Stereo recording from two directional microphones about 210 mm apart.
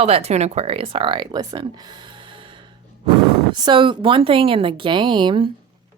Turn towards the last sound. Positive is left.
turn(degrees=-25)  # may be behind; listen again after turning